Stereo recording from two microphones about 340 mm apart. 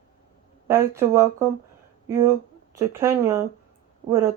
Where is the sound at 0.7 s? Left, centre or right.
Centre.